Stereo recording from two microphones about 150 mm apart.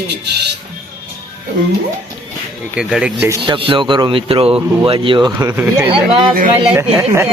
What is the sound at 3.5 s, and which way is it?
Speech, 35° right (ahead or behind).